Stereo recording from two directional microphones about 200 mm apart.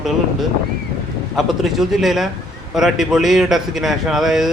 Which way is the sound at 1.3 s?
Centre (ahead or behind).